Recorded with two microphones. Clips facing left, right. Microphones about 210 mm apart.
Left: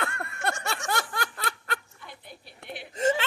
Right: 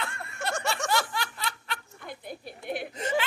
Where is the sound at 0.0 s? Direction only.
55° left (ahead or behind).